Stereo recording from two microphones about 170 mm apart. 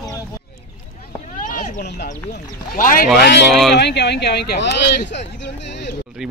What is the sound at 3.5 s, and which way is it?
Speech, centre (ahead or behind).